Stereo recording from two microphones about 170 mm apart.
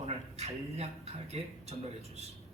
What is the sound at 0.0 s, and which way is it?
A man's voice, 40° right (ahead or behind).